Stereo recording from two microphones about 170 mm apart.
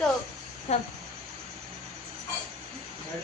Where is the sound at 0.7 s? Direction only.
40° left (ahead or behind).